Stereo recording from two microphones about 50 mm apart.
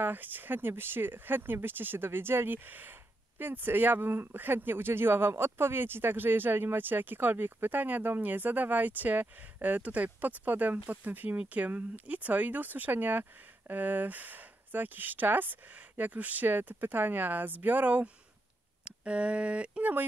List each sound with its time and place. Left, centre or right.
0.0 s speech: right
18.9 s speech: right